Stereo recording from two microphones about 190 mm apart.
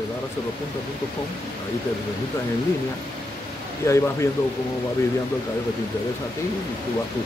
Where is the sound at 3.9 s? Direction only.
15° left (ahead or behind).